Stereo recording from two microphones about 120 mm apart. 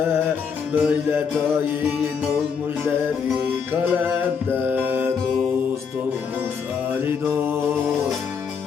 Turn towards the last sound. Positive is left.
turn(degrees=-20)  # may be behind; listen again after turning